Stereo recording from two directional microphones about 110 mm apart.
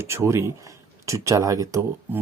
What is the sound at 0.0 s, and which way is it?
Speech, 25° right (ahead or behind).